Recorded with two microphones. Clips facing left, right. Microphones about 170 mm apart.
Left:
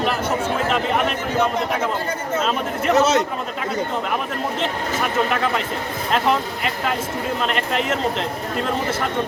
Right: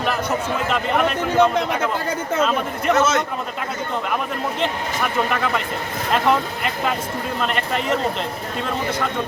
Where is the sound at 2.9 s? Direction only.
35° left (ahead or behind).